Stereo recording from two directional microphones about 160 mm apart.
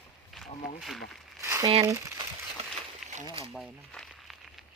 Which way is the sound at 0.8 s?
Centre (ahead or behind).